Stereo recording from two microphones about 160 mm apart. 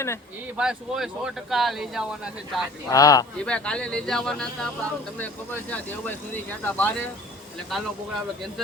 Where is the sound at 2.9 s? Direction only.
20° left (ahead or behind).